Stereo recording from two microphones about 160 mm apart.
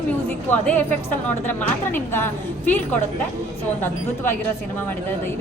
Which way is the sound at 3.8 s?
15° left (ahead or behind).